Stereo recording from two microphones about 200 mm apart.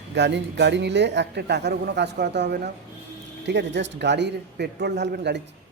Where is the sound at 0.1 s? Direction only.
60° right (ahead or behind).